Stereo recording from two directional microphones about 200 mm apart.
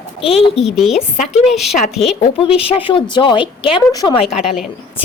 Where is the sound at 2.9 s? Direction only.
25° left (ahead or behind).